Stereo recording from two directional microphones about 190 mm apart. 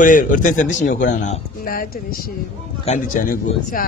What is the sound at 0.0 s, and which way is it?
A man's voice, 45° left (ahead or behind).